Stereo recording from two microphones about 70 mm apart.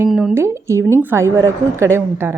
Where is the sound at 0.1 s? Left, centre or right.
Centre.